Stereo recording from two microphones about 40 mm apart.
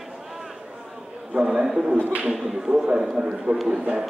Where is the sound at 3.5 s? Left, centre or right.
Right.